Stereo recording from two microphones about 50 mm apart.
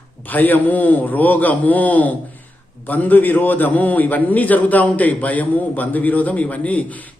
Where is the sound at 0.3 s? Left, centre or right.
Left.